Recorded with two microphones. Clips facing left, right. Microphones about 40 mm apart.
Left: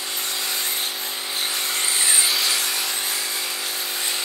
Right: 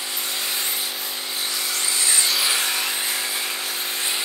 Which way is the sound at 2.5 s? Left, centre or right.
Right.